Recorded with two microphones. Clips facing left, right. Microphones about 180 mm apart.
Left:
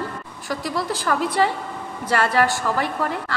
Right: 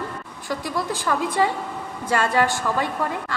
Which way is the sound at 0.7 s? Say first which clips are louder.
Left 1 dB; 20° right (ahead or behind).